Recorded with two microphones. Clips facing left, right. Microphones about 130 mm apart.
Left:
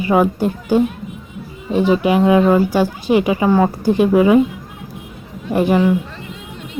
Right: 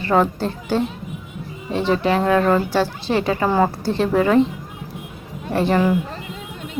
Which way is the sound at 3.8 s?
15° left (ahead or behind).